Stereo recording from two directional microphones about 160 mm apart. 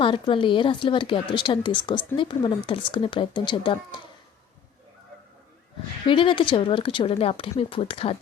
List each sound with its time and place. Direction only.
0.0 s speech: 30° left (ahead or behind)
6.1 s speech: 30° left (ahead or behind)